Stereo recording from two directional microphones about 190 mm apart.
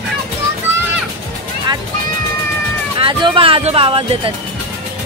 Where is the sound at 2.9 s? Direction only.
25° right (ahead or behind).